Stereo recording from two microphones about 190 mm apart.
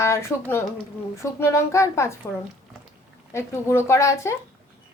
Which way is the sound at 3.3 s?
15° left (ahead or behind).